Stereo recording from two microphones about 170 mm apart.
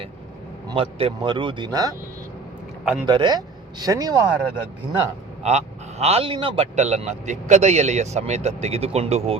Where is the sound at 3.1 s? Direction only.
25° right (ahead or behind).